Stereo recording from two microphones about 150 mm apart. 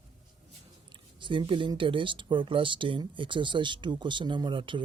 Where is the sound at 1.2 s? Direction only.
35° right (ahead or behind).